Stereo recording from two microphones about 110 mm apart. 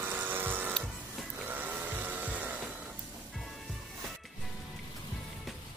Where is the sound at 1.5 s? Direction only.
15° right (ahead or behind).